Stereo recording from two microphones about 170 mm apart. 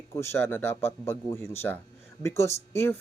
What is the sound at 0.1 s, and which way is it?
Speech, 15° left (ahead or behind).